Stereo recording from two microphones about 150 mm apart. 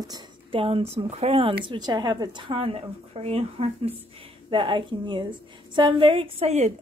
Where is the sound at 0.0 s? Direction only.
30° right (ahead or behind).